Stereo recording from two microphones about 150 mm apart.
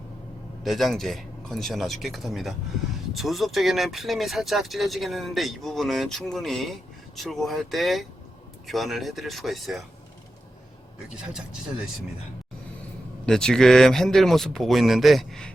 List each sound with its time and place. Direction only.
0.6 s speech: centre (ahead or behind)
13.2 s speech: 5° left (ahead or behind)